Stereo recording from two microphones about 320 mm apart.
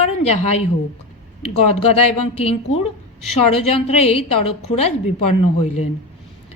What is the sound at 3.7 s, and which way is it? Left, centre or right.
Speech, centre.